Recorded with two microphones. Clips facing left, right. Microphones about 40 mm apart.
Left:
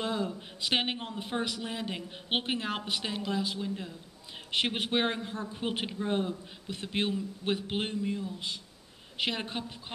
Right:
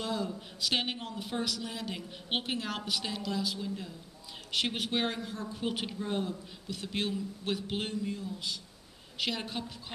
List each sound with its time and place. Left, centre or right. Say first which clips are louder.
0.0 s a man's voice: left 2 dB; left